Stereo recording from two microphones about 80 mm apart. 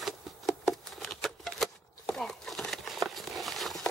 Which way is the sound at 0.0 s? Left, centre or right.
Centre.